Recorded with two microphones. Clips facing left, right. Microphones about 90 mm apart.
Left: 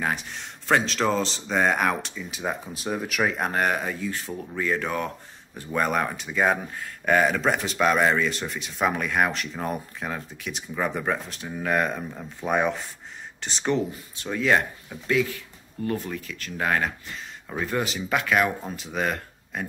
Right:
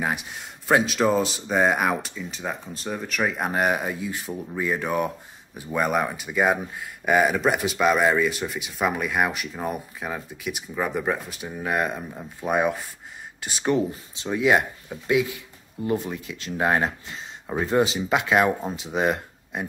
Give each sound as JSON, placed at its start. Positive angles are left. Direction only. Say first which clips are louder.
{"t": 0.0, "sound": "speech", "louder": "right 1 dB", "side_deg": -10}
{"t": 2.3, "sound": "speech", "louder": "left 3 dB", "side_deg": 5}